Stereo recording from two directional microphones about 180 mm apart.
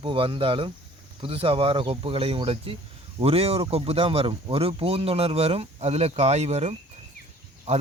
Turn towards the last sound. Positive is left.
turn(degrees=-35)  # may be behind; listen again after turning